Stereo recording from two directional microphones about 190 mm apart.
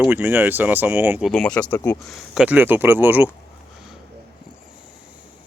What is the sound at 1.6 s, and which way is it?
Speech, 20° left (ahead or behind).